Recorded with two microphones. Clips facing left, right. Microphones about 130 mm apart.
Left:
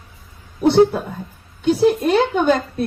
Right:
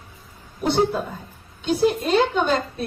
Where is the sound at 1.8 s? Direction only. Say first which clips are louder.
Left 3 dB; 55° left (ahead or behind).